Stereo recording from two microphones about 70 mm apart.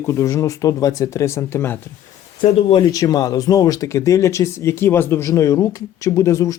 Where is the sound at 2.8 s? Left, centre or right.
Left.